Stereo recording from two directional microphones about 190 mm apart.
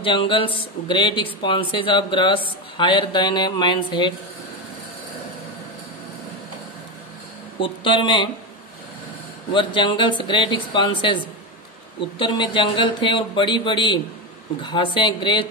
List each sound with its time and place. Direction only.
0.0 s speech: 25° left (ahead or behind)
7.6 s speech: 25° left (ahead or behind)
9.5 s speech: 25° left (ahead or behind)